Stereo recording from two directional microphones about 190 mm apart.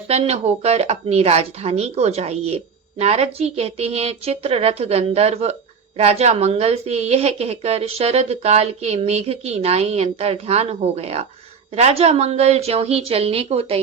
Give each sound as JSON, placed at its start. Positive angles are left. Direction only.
{"t": 0.1, "sound": "a woman's voice", "side_deg": -35}